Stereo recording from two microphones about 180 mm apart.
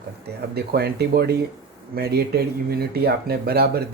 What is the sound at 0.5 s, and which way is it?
Speech, 60° right (ahead or behind).